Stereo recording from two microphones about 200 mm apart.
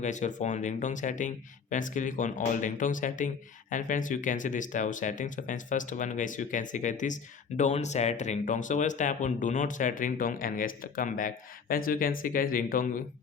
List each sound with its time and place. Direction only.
0.0 s speech: 35° left (ahead or behind)